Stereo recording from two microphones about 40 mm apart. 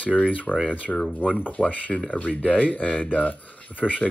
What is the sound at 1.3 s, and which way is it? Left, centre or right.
Speech, left.